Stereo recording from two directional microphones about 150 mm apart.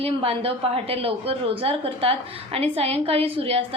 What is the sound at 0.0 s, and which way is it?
A woman's voice, 40° right (ahead or behind).